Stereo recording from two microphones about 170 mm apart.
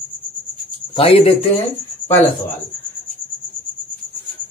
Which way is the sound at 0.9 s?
35° left (ahead or behind).